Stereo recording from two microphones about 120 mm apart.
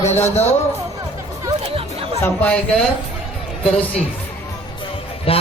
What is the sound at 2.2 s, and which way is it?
Speech, 15° left (ahead or behind).